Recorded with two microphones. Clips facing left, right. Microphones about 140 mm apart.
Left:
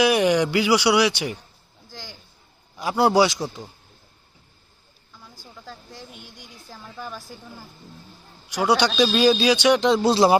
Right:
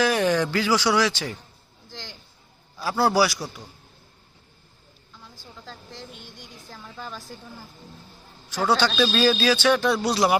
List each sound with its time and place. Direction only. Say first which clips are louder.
0.0 s a man's voice: left 3 dB; 15° left (ahead or behind)
1.9 s a sound: even; 5° left (ahead or behind)
2.7 s a man's voice: left 3 dB; 15° left (ahead or behind)
5.2 s a sound: left 1 dB; 5° left (ahead or behind)
6.7 s a man's voice: left 2 dB; 5° left (ahead or behind)
8.4 s a man's voice: left 2 dB; 15° left (ahead or behind)